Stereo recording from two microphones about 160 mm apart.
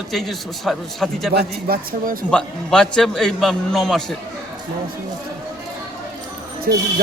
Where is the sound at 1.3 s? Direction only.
80° right.